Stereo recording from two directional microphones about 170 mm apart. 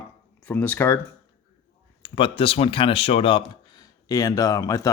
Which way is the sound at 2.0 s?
30° left (ahead or behind).